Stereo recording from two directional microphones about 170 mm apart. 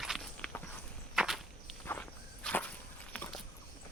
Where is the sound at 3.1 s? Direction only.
5° left (ahead or behind).